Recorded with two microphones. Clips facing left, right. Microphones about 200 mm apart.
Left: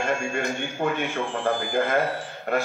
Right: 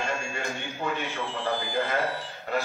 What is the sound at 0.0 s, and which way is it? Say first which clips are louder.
A man's voice: left 6 dB; 50° left (ahead or behind).